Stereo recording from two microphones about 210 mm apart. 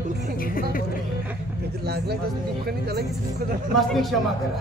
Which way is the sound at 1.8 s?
50° right (ahead or behind).